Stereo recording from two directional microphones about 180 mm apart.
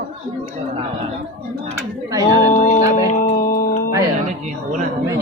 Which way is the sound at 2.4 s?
40° left (ahead or behind).